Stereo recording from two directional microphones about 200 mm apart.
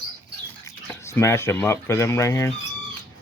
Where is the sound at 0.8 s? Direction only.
15° left (ahead or behind).